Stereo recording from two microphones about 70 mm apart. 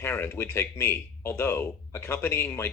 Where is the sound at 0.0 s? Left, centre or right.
Left.